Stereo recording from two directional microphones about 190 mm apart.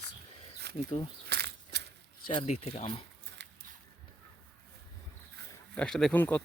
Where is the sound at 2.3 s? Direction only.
30° left (ahead or behind).